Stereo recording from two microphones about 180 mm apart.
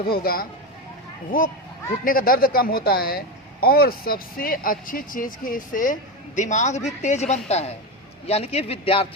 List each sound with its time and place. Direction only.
0.0 s speech: 55° left (ahead or behind)
2.0 s speech: 50° left (ahead or behind); by 9.0 s 30° left (ahead or behind)